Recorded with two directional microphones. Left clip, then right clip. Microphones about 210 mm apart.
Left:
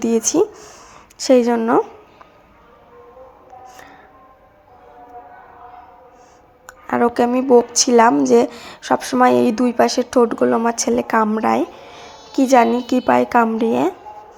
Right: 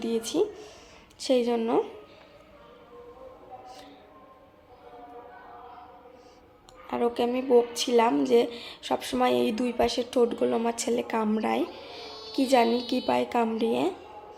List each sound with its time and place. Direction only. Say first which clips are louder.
0.0 s speech: left 10 dB; 30° left (ahead or behind)
6.7 s a woman's voice: left 10 dB; 25° left (ahead or behind)
11.6 s a sound: left 7 dB; 15° right (ahead or behind)
12.3 s a woman's voice: left 9 dB; 20° left (ahead or behind)